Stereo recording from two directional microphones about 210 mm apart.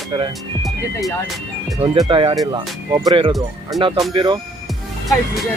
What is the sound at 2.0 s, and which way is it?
Speech, 25° right (ahead or behind).